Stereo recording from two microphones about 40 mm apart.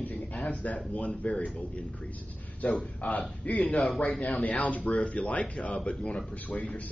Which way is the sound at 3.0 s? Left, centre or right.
Left.